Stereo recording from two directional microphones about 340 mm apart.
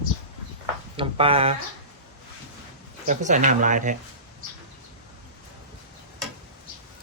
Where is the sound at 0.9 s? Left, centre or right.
Centre.